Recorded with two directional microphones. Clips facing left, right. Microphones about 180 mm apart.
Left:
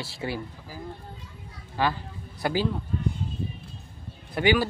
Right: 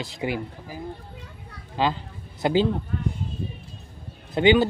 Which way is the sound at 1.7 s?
20° right (ahead or behind).